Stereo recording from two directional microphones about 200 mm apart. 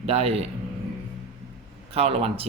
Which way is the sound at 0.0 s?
30° right (ahead or behind).